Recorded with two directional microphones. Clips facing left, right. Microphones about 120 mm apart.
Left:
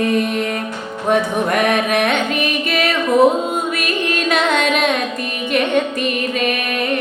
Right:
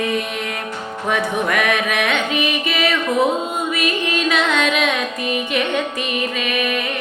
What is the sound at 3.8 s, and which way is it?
Carnatic music, 50° left (ahead or behind).